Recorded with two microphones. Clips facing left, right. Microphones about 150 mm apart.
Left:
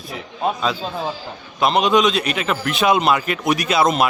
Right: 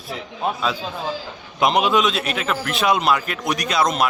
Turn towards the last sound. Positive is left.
turn(degrees=5)  # may be behind; listen again after turning